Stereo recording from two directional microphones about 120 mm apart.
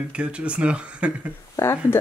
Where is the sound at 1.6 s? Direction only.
20° left (ahead or behind).